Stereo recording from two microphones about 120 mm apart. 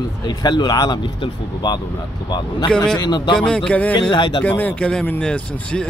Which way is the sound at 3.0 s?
35° left (ahead or behind).